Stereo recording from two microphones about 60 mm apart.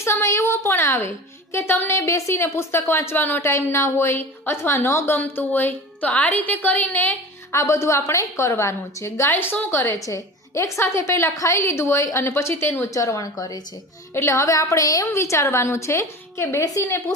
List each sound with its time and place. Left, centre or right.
0.0 s a woman's voice: left
1.5 s a sound: left
1.9 s a woman's voice: left
3.4 s a woman's voice: left
5.1 s a woman's voice: left
7.5 s a woman's voice: left
10.2 s a woman's voice: left
12.9 s a woman's voice: left
14.1 s a woman's voice: left